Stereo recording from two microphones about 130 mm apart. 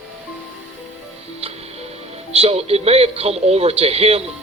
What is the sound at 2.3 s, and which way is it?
Speech, 55° right (ahead or behind).